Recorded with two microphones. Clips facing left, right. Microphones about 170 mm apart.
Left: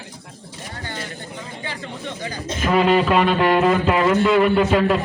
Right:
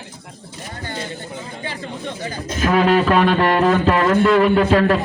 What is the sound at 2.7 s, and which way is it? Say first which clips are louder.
A man's voice: right 1 dB; centre (ahead or behind).